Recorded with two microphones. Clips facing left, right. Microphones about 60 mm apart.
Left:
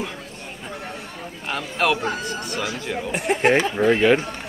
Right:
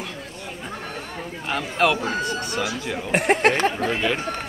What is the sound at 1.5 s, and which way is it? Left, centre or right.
Speech, centre.